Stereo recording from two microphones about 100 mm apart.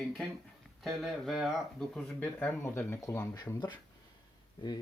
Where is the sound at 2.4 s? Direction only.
20° left (ahead or behind).